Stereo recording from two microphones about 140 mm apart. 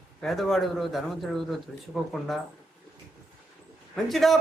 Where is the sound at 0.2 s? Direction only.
Centre (ahead or behind).